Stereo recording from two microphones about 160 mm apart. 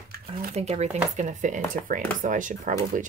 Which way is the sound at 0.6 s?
40° right (ahead or behind).